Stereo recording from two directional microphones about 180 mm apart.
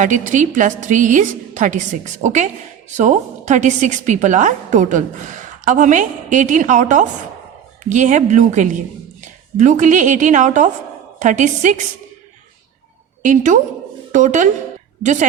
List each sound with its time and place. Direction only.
0.0 s a woman's voice: 45° right (ahead or behind)
13.2 s a woman's voice: 45° right (ahead or behind)